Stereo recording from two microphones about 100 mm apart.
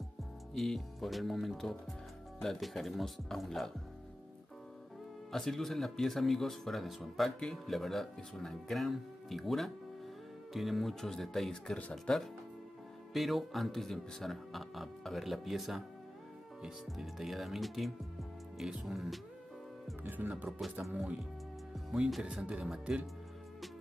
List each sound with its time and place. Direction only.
0.6 s speech: centre (ahead or behind)
5.3 s speech: 5° left (ahead or behind)
20.0 s speech: 20° right (ahead or behind)
21.7 s speech: 5° right (ahead or behind)